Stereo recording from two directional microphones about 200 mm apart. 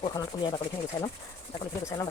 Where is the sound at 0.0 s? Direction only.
25° left (ahead or behind).